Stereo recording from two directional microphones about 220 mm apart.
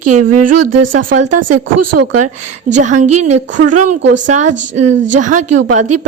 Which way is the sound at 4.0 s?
55° right (ahead or behind).